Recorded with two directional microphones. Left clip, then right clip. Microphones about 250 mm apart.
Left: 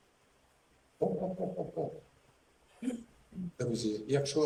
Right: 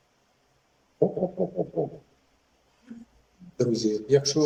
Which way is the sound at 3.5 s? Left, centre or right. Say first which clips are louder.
Right 10 dB; right.